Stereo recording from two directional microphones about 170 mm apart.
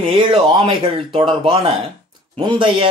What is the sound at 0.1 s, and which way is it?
Speech, 30° right (ahead or behind).